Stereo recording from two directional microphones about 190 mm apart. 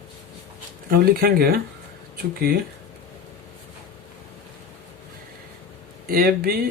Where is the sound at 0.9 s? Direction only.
55° right (ahead or behind).